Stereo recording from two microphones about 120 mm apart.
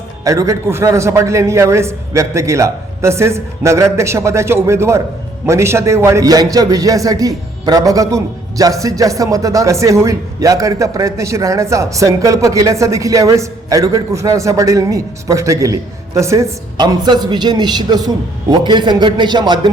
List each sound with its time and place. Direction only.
0.3 s a man's voice: 25° right (ahead or behind)
16.7 s a man's voice: 35° right (ahead or behind)